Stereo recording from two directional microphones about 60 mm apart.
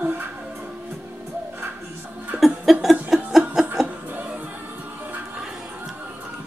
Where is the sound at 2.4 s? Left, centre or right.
Centre.